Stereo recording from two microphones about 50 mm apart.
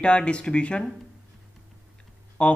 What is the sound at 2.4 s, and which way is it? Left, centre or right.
Speech, left.